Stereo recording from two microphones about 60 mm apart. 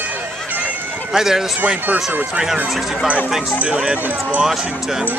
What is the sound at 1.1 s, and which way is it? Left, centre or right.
Speech, centre.